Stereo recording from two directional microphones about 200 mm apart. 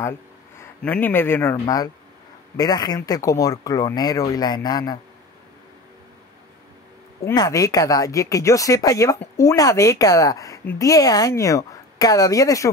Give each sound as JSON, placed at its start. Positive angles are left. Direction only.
{"t": 0.6, "sound": "speech", "side_deg": 10}
{"t": 7.2, "sound": "speech", "side_deg": 15}